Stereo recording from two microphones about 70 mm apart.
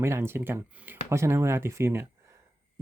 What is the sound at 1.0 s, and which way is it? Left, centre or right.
Speech, right.